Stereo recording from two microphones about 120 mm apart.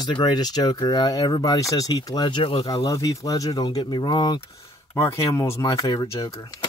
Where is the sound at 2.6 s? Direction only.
30° left (ahead or behind).